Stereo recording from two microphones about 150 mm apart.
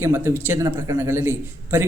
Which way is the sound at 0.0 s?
15° right (ahead or behind).